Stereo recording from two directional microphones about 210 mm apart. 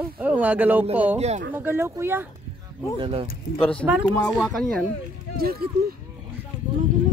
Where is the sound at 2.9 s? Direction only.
25° right (ahead or behind).